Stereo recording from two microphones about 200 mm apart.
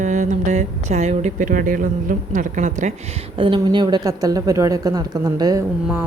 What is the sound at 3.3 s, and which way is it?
Speech, 25° right (ahead or behind).